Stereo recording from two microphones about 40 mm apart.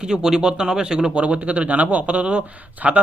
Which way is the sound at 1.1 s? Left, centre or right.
Right.